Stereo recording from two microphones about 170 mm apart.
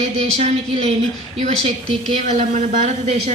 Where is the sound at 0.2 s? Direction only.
40° right (ahead or behind).